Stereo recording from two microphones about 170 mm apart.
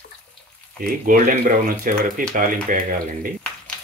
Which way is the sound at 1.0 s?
50° right (ahead or behind).